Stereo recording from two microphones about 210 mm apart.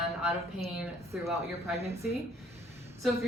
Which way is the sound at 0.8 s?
5° right (ahead or behind).